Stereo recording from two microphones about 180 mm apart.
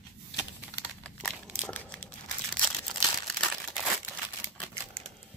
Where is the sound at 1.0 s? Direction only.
5° left (ahead or behind).